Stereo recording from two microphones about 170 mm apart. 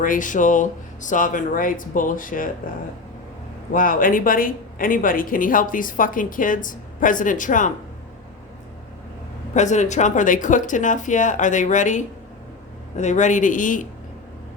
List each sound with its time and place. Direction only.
0.0 s speech: 50° left (ahead or behind)
3.7 s speech: 55° left (ahead or behind)
9.6 s speech: 45° left (ahead or behind)